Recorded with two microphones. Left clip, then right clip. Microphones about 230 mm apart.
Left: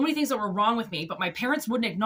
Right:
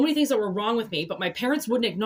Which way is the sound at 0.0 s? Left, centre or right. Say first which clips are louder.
Right 4 dB; centre.